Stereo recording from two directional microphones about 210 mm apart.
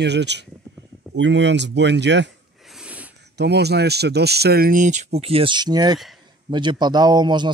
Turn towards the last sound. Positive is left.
turn(degrees=-20)  # may be behind; listen again after turning